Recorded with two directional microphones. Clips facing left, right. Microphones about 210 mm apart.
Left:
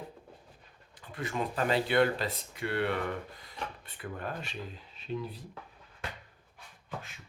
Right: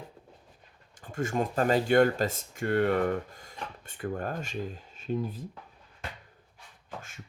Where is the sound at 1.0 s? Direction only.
45° right (ahead or behind).